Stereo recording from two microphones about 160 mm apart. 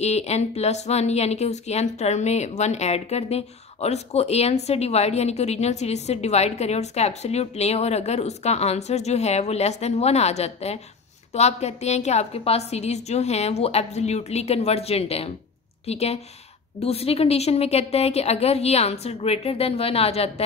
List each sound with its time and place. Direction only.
0.0 s a woman's voice: 40° left (ahead or behind)